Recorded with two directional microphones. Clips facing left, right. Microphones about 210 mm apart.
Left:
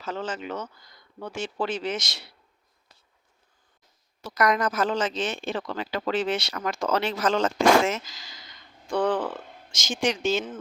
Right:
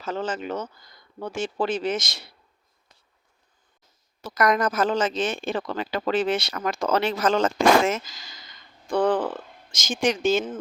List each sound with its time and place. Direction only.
0.0 s a woman's voice: 45° right (ahead or behind)
4.2 s a woman's voice: 50° right (ahead or behind)
9.0 s speech: 35° right (ahead or behind)
9.9 s a woman's voice: 50° right (ahead or behind)